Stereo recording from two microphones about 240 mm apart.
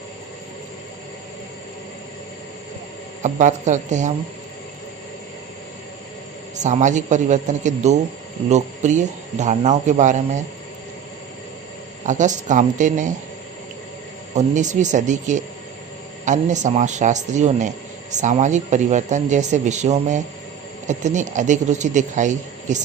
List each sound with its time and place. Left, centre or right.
3.2 s speech: right
6.6 s speech: right
12.0 s speech: right
14.3 s speech: right